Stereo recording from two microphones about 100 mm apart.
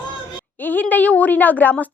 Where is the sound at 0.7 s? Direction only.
20° left (ahead or behind).